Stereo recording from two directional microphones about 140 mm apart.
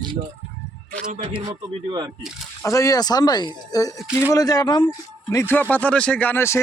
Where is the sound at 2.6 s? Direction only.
20° left (ahead or behind).